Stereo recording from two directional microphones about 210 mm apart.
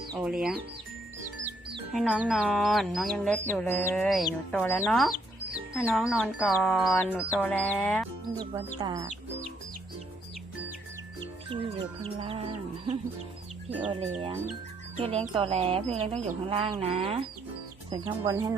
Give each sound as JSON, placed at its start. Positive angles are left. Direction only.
{"t": 0.2, "sound": "speech", "side_deg": -5}
{"t": 1.9, "sound": "speech", "side_deg": 0}
{"t": 6.9, "sound": "speech", "side_deg": 10}
{"t": 8.8, "sound": "speech", "side_deg": -15}
{"t": 11.2, "sound": "music", "side_deg": -25}
{"t": 14.9, "sound": "speech", "side_deg": -30}
{"t": 16.5, "sound": "music", "side_deg": -25}
{"t": 17.9, "sound": "speech", "side_deg": -15}